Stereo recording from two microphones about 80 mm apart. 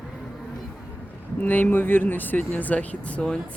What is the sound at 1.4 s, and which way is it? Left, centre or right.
Speech, left.